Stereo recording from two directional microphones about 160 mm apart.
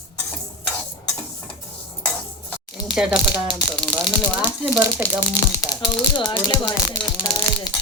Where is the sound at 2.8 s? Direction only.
5° right (ahead or behind).